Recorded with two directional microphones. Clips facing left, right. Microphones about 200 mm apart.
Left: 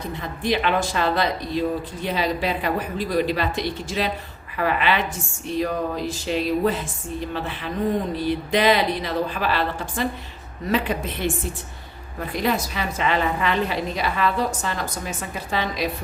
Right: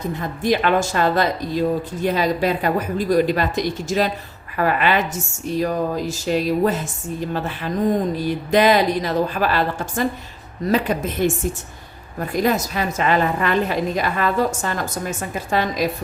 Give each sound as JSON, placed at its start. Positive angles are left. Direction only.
{"t": 0.2, "sound": "speech", "side_deg": -45}
{"t": 12.3, "sound": "speech", "side_deg": -45}